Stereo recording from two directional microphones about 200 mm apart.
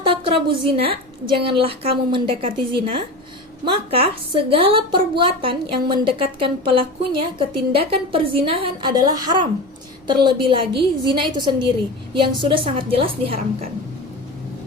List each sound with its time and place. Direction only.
0.4 s a woman's voice: 25° right (ahead or behind)